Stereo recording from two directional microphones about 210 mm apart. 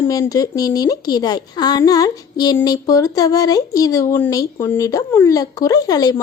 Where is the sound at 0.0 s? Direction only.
15° left (ahead or behind).